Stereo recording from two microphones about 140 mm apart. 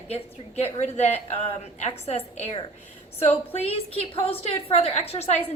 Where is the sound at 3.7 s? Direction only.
45° left (ahead or behind).